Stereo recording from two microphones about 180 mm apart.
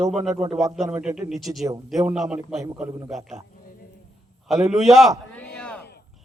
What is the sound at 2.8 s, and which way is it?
Speech, 20° right (ahead or behind).